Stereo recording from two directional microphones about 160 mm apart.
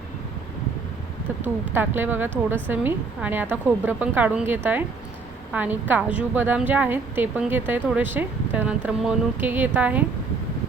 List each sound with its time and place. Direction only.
1.7 s speech: 15° right (ahead or behind)